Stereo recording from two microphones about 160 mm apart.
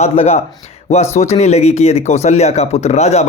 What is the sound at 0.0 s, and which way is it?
Speech, 40° left (ahead or behind).